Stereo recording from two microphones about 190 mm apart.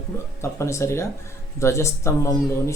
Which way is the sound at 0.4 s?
15° left (ahead or behind).